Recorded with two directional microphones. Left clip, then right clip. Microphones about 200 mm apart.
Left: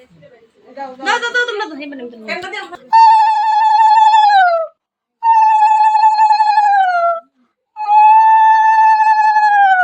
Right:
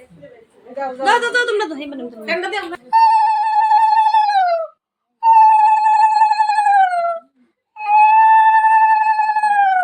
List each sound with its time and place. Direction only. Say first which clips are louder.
0.9 s a woman's voice: even; 45° right (ahead or behind)
2.9 s a sound: left 4 dB; 40° left (ahead or behind)
5.2 s cat: even; 40° left (ahead or behind)
7.8 s music: left 3 dB; 25° left (ahead or behind)